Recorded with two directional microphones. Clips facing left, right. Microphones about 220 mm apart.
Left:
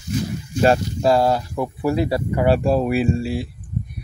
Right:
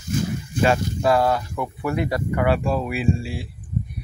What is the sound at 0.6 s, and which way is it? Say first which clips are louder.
Speech: left 3 dB; 35° left (ahead or behind).